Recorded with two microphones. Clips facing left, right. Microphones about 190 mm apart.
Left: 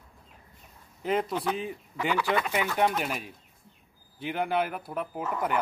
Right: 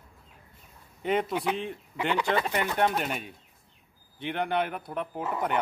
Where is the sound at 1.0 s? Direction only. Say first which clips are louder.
Right 1 dB; centre (ahead or behind).